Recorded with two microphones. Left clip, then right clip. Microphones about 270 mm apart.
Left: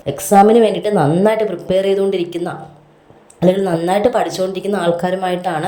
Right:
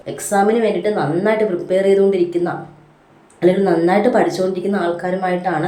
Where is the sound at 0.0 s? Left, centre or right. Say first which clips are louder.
Left 6 dB; left.